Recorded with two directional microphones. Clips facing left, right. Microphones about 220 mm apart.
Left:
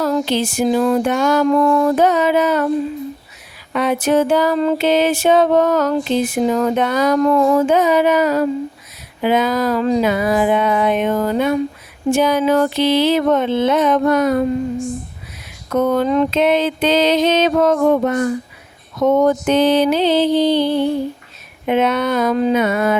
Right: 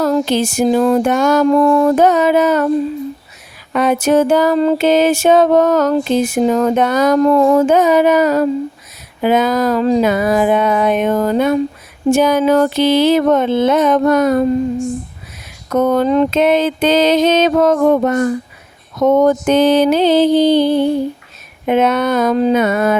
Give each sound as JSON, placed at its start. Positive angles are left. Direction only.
{"t": 0.0, "sound": "music", "side_deg": -45}
{"t": 3.7, "sound": "music", "side_deg": -45}
{"t": 15.7, "sound": "music", "side_deg": -45}